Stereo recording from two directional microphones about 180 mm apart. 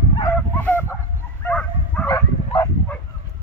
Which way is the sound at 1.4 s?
5° left (ahead or behind).